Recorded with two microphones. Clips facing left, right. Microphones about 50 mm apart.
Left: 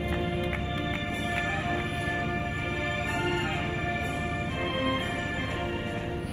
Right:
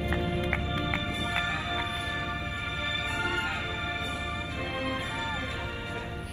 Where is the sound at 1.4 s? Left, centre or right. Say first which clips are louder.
Left 1 dB; left.